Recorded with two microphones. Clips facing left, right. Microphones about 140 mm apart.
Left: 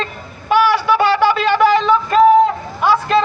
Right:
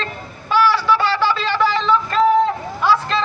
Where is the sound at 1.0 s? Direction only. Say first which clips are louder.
Left 5 dB; 55° left (ahead or behind).